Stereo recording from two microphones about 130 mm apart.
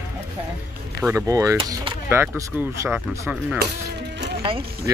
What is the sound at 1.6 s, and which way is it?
Speech, 35° right (ahead or behind).